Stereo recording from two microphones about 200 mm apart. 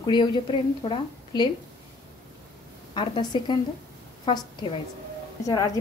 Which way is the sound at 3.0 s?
25° left (ahead or behind).